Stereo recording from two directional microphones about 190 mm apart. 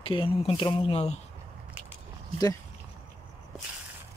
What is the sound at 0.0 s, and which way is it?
Speech, 30° left (ahead or behind).